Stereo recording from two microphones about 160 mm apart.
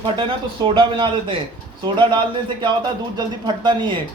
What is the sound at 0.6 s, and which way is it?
Speech, 30° right (ahead or behind).